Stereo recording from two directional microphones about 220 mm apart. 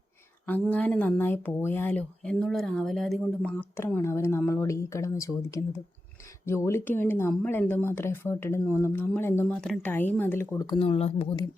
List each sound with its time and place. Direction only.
0.6 s speech: 5° left (ahead or behind)
10.8 s speech: 25° left (ahead or behind)